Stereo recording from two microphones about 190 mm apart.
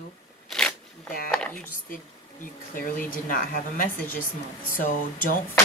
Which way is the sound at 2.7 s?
45° left (ahead or behind).